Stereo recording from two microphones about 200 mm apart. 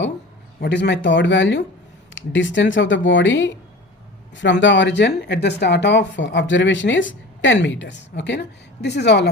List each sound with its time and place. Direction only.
0.6 s speech: 60° left (ahead or behind)